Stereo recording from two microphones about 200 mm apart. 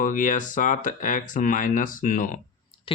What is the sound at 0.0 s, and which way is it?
Speech, 40° left (ahead or behind).